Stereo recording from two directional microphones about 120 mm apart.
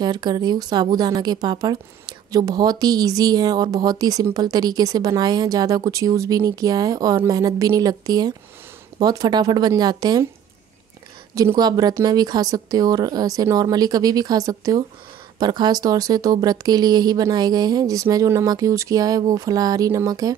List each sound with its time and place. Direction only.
0.0 s speech: 35° right (ahead or behind)
11.3 s speech: 30° right (ahead or behind)